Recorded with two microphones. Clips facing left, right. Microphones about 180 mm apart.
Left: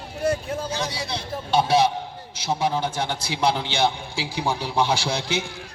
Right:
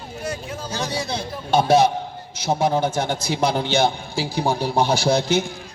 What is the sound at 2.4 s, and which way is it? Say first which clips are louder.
A man's voice: right 4 dB; 45° right (ahead or behind).